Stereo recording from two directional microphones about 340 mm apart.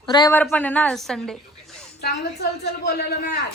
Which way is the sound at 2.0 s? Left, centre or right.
Left.